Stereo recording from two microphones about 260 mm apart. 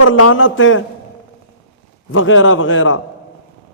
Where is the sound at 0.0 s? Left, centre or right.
Left.